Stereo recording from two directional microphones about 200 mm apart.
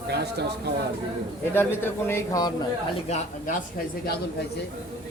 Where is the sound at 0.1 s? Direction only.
55° right (ahead or behind).